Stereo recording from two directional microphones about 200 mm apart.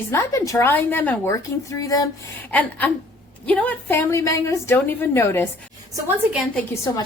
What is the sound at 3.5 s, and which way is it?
A woman's voice, 5° left (ahead or behind).